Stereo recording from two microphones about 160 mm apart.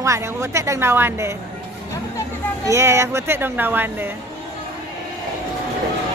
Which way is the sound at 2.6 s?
15° right (ahead or behind).